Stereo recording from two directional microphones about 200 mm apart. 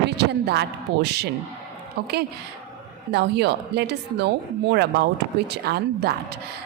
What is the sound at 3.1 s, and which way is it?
A woman's voice, 55° right (ahead or behind).